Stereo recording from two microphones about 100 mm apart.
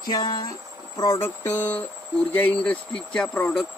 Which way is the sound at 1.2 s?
25° left (ahead or behind).